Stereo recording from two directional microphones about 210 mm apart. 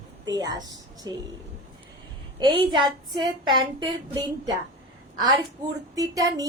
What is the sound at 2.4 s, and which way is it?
A woman's voice, 20° right (ahead or behind).